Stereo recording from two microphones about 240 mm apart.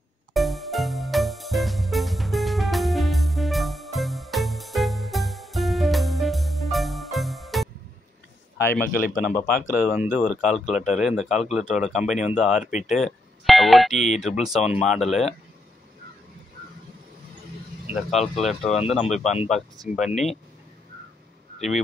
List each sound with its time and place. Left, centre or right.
0.3 s music: centre
8.5 s speech: centre
8.8 s speech: left
9.8 s speech: centre
17.8 s speech: centre
21.5 s speech: centre